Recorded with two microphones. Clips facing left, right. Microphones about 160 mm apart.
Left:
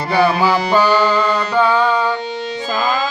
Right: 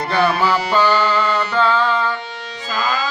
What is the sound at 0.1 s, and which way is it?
Music, 10° left (ahead or behind).